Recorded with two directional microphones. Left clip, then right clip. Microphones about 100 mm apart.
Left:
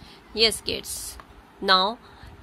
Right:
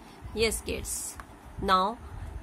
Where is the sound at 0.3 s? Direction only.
20° left (ahead or behind).